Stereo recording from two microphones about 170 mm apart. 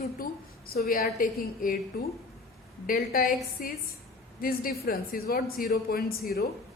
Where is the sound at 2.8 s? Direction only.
55° left (ahead or behind).